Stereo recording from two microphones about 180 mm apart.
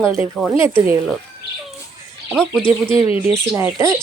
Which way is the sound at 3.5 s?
15° right (ahead or behind).